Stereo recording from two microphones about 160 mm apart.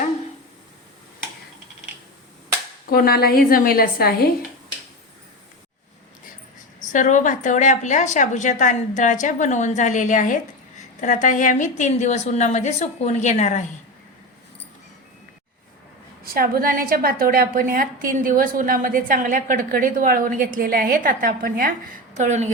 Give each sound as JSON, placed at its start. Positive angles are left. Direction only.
{"t": 2.9, "sound": "a woman's voice", "side_deg": 70}
{"t": 6.9, "sound": "a woman's voice", "side_deg": 50}
{"t": 16.2, "sound": "a woman's voice", "side_deg": -65}